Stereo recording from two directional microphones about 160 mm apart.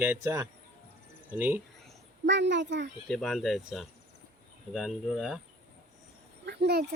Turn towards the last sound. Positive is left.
turn(degrees=-85)